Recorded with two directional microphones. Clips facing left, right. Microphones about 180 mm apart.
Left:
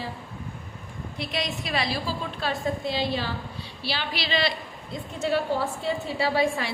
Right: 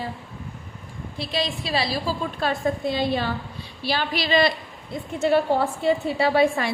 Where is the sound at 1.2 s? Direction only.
30° right (ahead or behind); by 4.5 s 45° right (ahead or behind).